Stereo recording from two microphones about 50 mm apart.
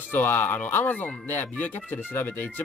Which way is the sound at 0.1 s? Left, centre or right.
Left.